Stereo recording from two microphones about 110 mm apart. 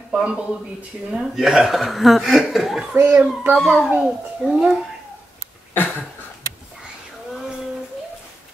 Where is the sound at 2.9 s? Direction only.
20° right (ahead or behind).